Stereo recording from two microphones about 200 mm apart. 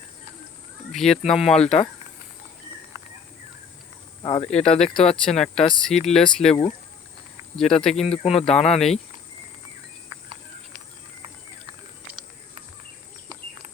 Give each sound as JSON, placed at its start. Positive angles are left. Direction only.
{"t": 0.9, "sound": "speech", "side_deg": 0}
{"t": 4.2, "sound": "speech", "side_deg": 25}
{"t": 4.5, "sound": "speech", "side_deg": 5}
{"t": 8.2, "sound": "speech", "side_deg": 30}
{"t": 8.4, "sound": "speech", "side_deg": 5}